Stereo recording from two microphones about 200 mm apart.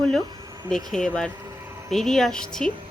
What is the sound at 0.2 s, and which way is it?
Insect, 20° right (ahead or behind).